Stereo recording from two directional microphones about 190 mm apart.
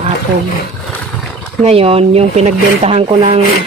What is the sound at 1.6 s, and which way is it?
Speech, 30° right (ahead or behind).